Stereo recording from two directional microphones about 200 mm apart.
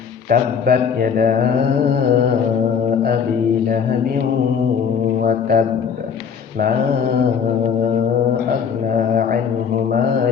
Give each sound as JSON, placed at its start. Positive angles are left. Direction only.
{"t": 0.3, "sound": "mantra", "side_deg": -50}
{"t": 5.2, "sound": "mantra", "side_deg": -45}